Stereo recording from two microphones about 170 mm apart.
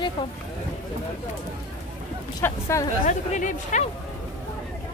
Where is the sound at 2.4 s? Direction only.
15° left (ahead or behind).